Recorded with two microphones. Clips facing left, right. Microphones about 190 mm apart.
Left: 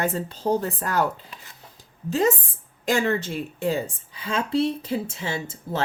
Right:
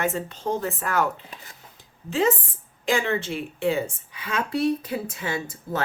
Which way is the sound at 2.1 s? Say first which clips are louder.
Left 1 dB; 40° left (ahead or behind).